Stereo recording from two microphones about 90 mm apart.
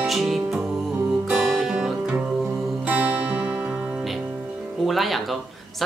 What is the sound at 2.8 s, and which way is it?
Music, 20° right (ahead or behind).